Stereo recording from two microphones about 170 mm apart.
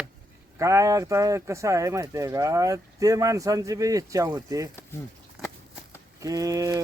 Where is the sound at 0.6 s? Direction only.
20° right (ahead or behind).